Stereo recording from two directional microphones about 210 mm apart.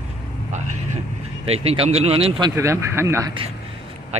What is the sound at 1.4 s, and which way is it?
Speech, 30° right (ahead or behind).